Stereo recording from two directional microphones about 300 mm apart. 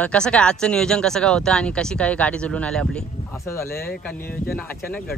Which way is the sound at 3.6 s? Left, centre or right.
Left.